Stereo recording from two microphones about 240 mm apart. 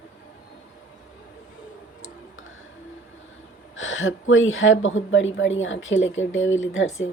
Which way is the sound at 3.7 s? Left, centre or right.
Left.